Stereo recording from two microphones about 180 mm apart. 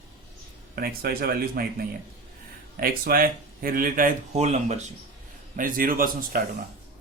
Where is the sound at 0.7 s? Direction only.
60° right (ahead or behind); by 4.8 s 40° right (ahead or behind).